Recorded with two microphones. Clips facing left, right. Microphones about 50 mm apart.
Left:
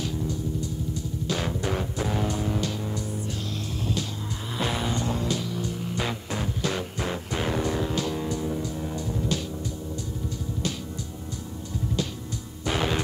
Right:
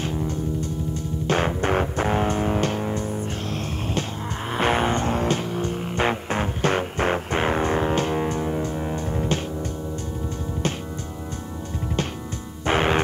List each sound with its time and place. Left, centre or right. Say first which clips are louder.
0.0 s music: right 3 dB; right
4.6 s music: right 7 dB; right
12.6 s music: right 6 dB; right